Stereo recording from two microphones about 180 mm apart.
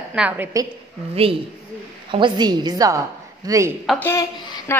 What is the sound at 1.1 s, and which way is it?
A woman's voice, 30° right (ahead or behind).